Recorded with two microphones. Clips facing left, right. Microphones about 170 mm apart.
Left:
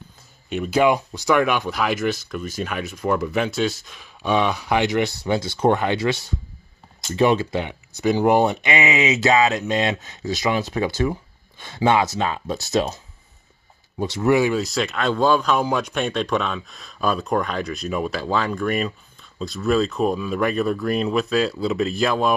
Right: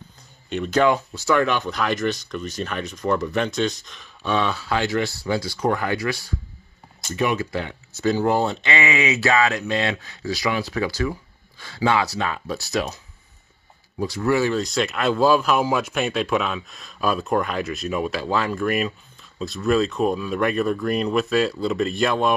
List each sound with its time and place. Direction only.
0.5 s speech: 10° left (ahead or behind)
14.6 s speech: centre (ahead or behind)